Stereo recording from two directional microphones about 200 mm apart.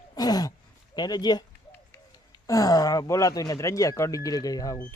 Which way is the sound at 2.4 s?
15° left (ahead or behind).